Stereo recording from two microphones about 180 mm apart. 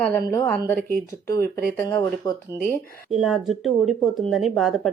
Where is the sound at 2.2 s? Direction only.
20° left (ahead or behind).